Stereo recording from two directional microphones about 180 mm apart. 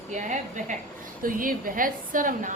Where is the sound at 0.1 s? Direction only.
45° right (ahead or behind).